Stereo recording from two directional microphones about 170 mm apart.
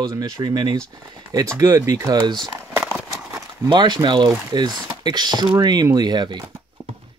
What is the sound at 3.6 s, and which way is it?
Speech, 25° right (ahead or behind).